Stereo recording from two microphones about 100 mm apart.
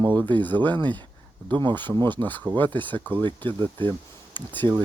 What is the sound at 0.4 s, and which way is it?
Speech, 20° left (ahead or behind).